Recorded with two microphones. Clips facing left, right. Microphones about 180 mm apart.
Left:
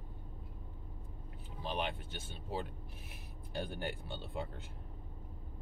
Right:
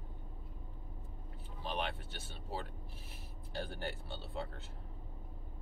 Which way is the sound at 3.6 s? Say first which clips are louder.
Left 2 dB; 15° left (ahead or behind).